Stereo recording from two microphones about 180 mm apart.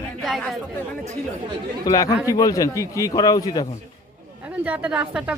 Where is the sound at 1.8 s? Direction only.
20° left (ahead or behind).